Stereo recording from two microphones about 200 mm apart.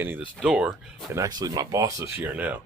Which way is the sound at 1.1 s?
20° right (ahead or behind).